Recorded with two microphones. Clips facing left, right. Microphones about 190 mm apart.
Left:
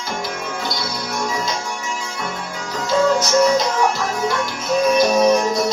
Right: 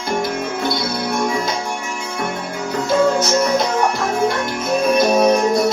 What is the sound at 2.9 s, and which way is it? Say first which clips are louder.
Music: right 1 dB; 55° right (ahead or behind).